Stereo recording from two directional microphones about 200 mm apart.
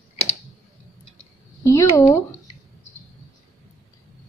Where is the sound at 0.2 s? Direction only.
30° left (ahead or behind).